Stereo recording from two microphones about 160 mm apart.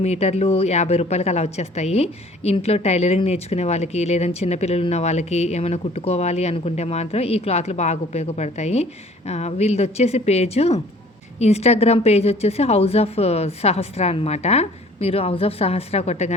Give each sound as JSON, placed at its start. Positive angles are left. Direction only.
{"t": 0.0, "sound": "speech", "side_deg": 40}